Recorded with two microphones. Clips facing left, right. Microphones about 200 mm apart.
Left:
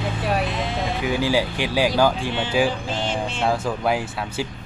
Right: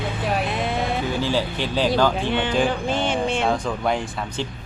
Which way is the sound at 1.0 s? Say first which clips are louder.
Left 2 dB; 10° left (ahead or behind).